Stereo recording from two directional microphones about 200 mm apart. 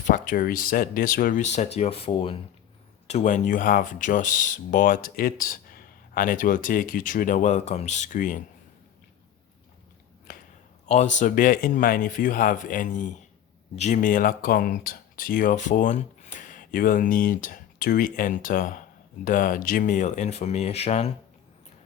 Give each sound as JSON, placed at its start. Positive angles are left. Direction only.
{"t": 0.0, "sound": "speech", "side_deg": 40}
{"t": 10.3, "sound": "a sound", "side_deg": 45}
{"t": 10.8, "sound": "a man's voice", "side_deg": 35}